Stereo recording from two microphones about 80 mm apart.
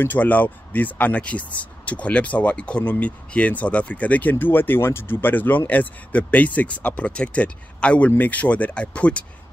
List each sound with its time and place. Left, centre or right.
0.0 s speech: left